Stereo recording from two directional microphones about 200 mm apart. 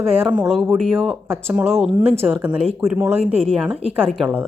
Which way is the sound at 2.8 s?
15° right (ahead or behind).